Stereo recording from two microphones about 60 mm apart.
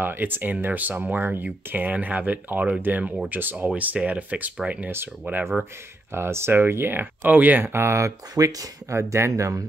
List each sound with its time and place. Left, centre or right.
0.0 s speech: right
5.4 s speech: centre
6.1 s speech: right
7.6 s speech: right
8.9 s speech: right
9.3 s speech: right